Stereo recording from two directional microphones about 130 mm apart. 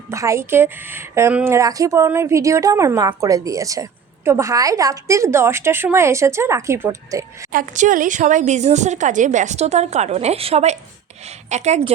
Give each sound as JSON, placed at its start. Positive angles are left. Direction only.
{"t": 0.1, "sound": "a woman's voice", "side_deg": -25}
{"t": 7.5, "sound": "a woman's voice", "side_deg": -90}